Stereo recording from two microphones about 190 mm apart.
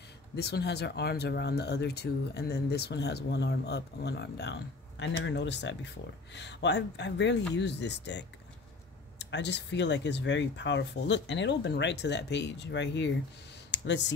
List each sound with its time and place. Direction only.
0.4 s speech: 60° left (ahead or behind)